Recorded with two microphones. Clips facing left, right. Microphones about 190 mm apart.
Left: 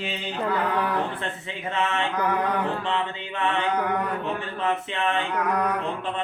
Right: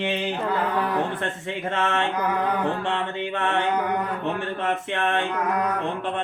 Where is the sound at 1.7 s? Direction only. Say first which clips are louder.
Right 1 dB; 50° right (ahead or behind).